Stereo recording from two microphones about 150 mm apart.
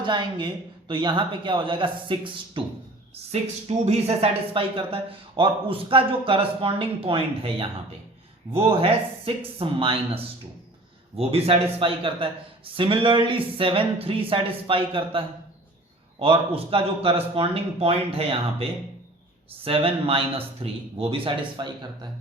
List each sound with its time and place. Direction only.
0.0 s speech: 30° right (ahead or behind)
3.4 s speech: 45° right (ahead or behind)
11.2 s speech: 40° right (ahead or behind)
19.6 s speech: 40° right (ahead or behind)